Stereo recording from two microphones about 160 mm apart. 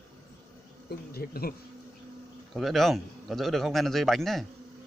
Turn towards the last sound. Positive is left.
turn(degrees=0)  # may be behind; listen again after turning